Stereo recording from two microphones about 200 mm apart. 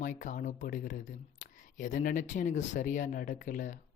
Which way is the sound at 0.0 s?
40° left (ahead or behind).